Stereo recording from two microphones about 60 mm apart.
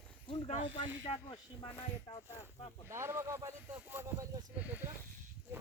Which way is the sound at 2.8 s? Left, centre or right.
Right.